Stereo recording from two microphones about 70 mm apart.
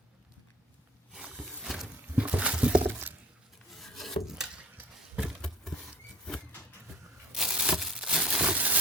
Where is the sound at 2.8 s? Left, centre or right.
Right.